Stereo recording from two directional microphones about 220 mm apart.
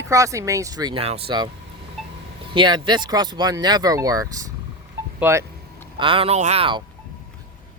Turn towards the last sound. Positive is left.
turn(degrees=-25)  # may be behind; listen again after turning